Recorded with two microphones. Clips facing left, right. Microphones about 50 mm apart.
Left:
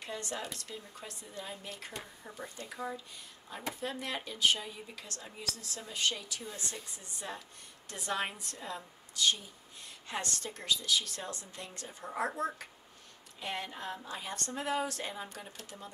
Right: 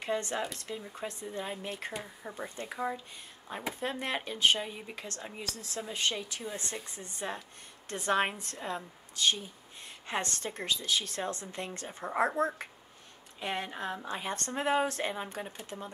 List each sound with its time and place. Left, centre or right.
0.0 s a woman's voice: right